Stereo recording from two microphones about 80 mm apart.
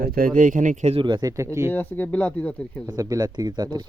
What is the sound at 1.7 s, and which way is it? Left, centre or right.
Speech, left.